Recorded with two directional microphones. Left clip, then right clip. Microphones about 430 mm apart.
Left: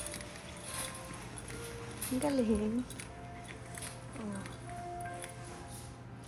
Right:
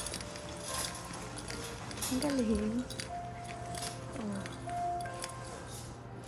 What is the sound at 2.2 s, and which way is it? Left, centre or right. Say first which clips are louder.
Speech: left 2 dB; centre.